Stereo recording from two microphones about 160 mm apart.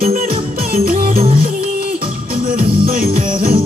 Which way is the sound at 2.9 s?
65° right (ahead or behind).